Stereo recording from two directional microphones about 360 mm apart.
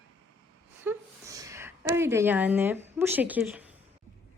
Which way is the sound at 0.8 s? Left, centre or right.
Centre.